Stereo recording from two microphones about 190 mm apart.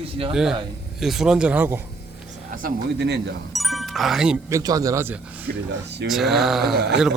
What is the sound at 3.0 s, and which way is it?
Speech, 65° right (ahead or behind).